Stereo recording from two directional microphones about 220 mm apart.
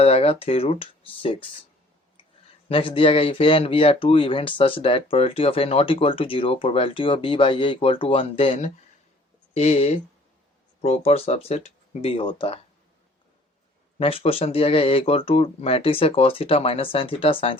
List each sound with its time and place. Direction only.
0.0 s speech: 25° left (ahead or behind)
2.6 s speech: 25° left (ahead or behind)
14.0 s speech: 25° left (ahead or behind)